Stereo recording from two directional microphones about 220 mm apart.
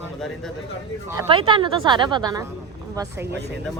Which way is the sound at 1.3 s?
25° right (ahead or behind).